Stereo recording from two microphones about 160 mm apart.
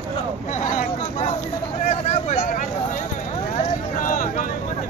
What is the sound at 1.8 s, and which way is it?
Vehicle, 45° left (ahead or behind).